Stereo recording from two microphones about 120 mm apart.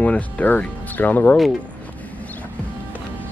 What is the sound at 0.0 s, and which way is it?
Speech, 10° left (ahead or behind).